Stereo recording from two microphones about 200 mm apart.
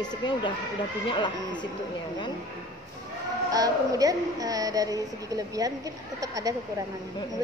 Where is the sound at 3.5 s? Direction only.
20° right (ahead or behind).